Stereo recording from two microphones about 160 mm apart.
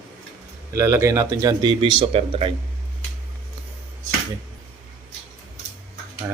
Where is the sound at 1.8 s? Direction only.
35° right (ahead or behind).